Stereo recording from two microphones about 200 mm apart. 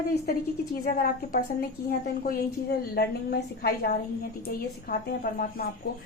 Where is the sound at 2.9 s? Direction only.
55° left (ahead or behind).